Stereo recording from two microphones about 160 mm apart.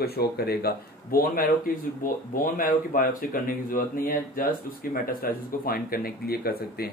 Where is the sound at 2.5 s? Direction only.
60° left (ahead or behind).